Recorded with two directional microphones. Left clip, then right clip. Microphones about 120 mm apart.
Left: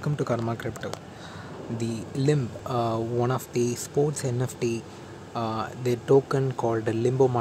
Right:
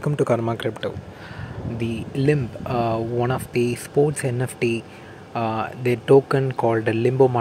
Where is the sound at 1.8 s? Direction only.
5° right (ahead or behind).